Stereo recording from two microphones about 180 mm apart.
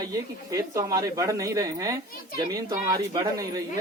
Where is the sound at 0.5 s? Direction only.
20° right (ahead or behind).